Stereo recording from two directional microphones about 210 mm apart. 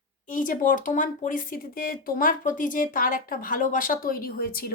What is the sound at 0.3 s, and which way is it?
Speech, 40° left (ahead or behind).